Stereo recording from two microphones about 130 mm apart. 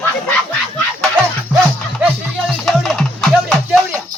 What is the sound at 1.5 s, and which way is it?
Music, 10° left (ahead or behind).